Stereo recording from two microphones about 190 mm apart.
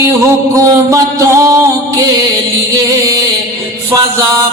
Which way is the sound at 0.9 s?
15° right (ahead or behind).